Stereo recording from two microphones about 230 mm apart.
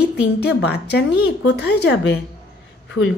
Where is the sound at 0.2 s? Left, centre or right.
Left.